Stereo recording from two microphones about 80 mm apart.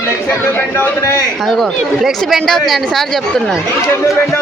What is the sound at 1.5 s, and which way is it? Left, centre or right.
Speech, centre.